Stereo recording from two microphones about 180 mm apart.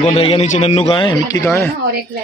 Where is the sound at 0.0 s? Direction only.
30° left (ahead or behind).